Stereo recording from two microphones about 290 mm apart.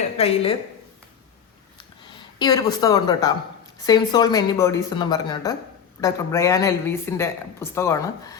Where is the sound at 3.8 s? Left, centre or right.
Centre.